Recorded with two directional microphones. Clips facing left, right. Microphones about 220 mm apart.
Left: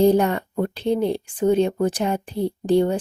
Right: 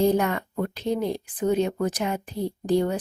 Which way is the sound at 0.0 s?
30° left (ahead or behind).